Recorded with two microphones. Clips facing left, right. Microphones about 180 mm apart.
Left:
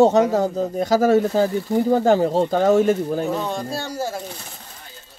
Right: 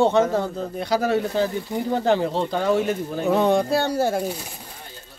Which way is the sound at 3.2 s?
60° right (ahead or behind).